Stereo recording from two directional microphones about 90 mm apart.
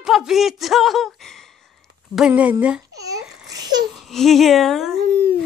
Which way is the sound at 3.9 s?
Centre (ahead or behind).